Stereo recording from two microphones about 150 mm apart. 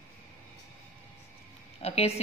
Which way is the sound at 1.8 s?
45° left (ahead or behind).